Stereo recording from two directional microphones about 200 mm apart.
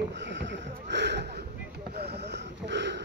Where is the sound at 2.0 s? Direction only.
55° right (ahead or behind).